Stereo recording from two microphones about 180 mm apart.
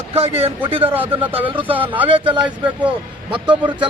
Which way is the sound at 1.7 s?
10° right (ahead or behind).